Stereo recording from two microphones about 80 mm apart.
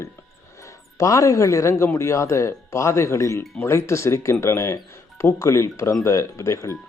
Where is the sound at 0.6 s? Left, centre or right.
Left.